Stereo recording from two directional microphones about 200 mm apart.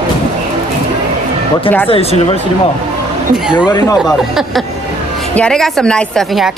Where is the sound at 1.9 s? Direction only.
30° left (ahead or behind).